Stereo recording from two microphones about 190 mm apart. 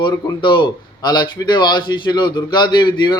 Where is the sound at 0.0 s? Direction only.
25° left (ahead or behind).